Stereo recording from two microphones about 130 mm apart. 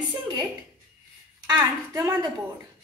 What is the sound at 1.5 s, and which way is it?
Speech, 20° right (ahead or behind).